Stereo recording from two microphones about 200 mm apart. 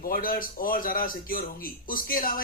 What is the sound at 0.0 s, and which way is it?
A man's voice, 45° left (ahead or behind).